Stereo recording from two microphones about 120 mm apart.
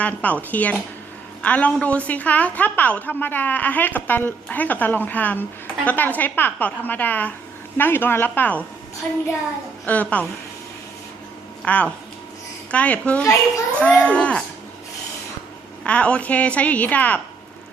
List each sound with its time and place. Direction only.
0.0 s a woman's voice: 15° left (ahead or behind)
9.8 s a woman's voice: 15° left (ahead or behind)
11.6 s a woman's voice: 10° left (ahead or behind)
15.8 s a woman's voice: 10° left (ahead or behind)